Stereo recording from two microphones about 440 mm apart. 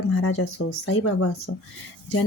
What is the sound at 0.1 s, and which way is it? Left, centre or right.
Speech, left.